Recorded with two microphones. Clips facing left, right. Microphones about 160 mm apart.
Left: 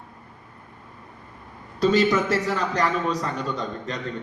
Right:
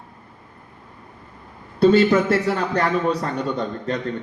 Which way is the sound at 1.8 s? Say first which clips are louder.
Right 5 dB; 40° right (ahead or behind).